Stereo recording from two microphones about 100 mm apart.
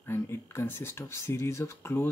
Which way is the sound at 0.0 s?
25° left (ahead or behind).